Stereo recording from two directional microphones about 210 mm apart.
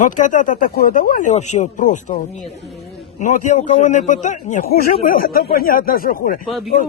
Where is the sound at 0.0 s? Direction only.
35° left (ahead or behind).